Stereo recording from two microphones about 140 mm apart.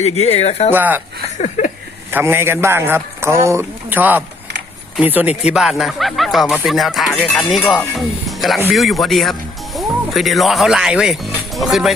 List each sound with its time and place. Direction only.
0.0 s speech: 50° left (ahead or behind)
0.7 s a man's voice: 15° right (ahead or behind)
1.4 s a sound: 60° left (ahead or behind)
2.0 s a man's voice: 15° right (ahead or behind); by 11.9 s centre (ahead or behind)